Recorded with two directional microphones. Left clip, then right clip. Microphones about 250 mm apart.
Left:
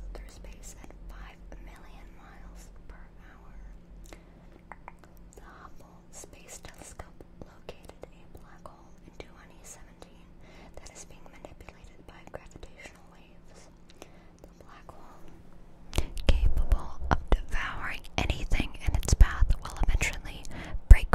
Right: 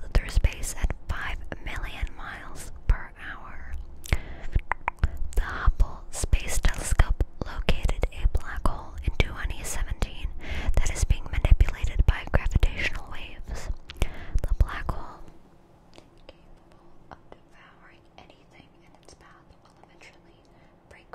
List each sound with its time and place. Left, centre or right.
0.1 s whispering: right
4.6 s whispering: right
15.9 s whispering: left